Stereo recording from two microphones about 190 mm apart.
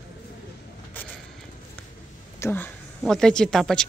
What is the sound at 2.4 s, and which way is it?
Speech, 10° left (ahead or behind).